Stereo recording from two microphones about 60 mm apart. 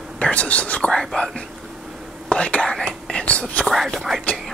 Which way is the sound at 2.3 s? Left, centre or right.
Centre.